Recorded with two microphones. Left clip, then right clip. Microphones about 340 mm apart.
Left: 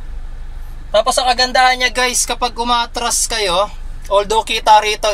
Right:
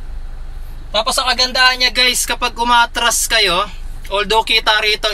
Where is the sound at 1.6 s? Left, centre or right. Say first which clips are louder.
Right 1 dB; centre.